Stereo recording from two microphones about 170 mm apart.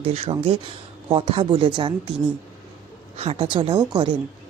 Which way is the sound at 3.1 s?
35° right (ahead or behind).